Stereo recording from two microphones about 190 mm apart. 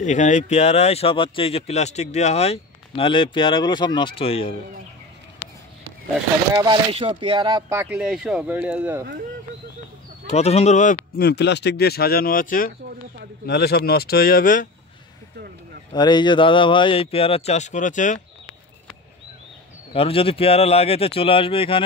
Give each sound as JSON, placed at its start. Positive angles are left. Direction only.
{"t": 0.0, "sound": "speech", "side_deg": 40}
{"t": 6.6, "sound": "speech", "side_deg": -25}
{"t": 10.3, "sound": "speech", "side_deg": 35}
{"t": 11.1, "sound": "speech", "side_deg": 60}
{"t": 15.9, "sound": "speech", "side_deg": 25}
{"t": 19.9, "sound": "speech", "side_deg": 30}